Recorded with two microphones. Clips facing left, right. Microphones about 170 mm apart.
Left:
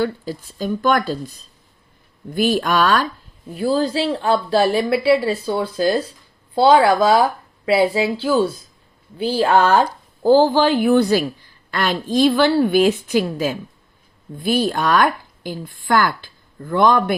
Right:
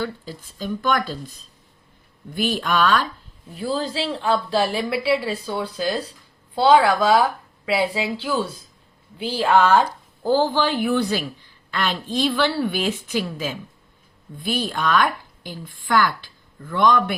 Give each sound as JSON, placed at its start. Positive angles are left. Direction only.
{"t": 0.0, "sound": "speech", "side_deg": 45}
{"t": 2.4, "sound": "a woman's voice", "side_deg": 40}